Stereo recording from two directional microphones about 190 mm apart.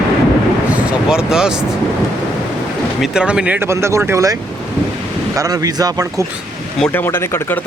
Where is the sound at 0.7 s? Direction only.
5° right (ahead or behind).